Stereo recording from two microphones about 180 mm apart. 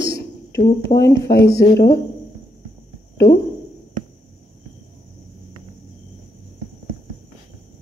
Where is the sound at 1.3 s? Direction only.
65° left (ahead or behind).